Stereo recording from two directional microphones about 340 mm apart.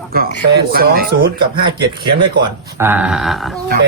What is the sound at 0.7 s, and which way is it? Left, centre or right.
Speech, right.